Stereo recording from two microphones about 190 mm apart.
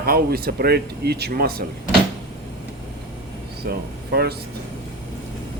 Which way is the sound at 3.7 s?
60° right (ahead or behind).